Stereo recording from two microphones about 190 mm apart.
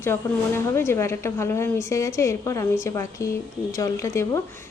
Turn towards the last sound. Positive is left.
turn(degrees=15)  # may be behind; listen again after turning